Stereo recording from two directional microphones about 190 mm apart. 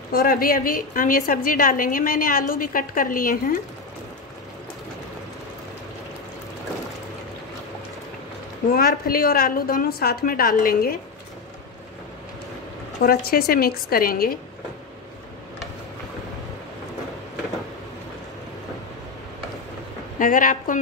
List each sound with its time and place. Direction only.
0.1 s a woman's voice: 50° left (ahead or behind)
8.6 s a woman's voice: 50° left (ahead or behind)
13.0 s a woman's voice: 55° left (ahead or behind)
20.2 s a woman's voice: 45° left (ahead or behind)